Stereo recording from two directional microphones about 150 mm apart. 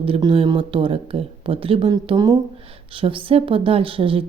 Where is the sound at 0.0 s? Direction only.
35° right (ahead or behind).